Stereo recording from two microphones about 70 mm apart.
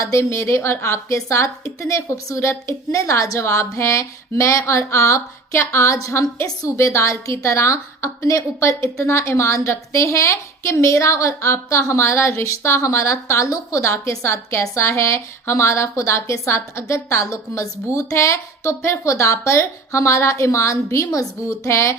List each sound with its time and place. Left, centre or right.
0.0 s a woman's voice: left